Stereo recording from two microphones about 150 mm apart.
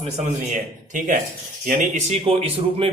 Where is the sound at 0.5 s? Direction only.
60° right (ahead or behind).